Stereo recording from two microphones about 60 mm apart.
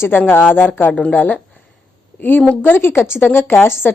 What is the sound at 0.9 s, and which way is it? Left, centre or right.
Speech, left.